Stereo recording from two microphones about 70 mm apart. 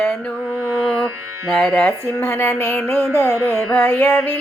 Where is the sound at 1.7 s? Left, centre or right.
Left.